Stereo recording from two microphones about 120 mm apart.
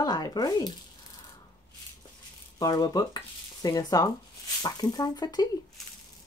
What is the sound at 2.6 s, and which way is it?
Speech, 35° left (ahead or behind).